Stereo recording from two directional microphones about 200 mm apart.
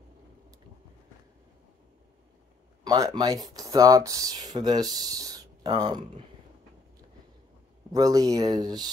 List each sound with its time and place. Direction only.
2.8 s speech: 20° right (ahead or behind)
7.9 s speech: 15° right (ahead or behind)